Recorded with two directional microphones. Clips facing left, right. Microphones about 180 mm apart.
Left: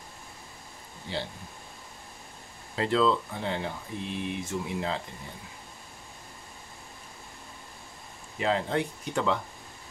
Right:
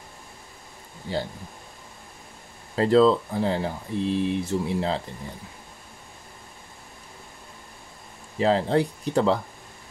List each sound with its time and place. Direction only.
1.1 s speech: 45° right (ahead or behind)
2.7 s speech: 40° right (ahead or behind)
8.4 s speech: 35° right (ahead or behind)